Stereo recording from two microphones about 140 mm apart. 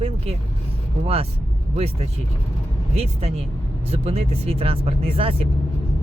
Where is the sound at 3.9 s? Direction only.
45° right (ahead or behind).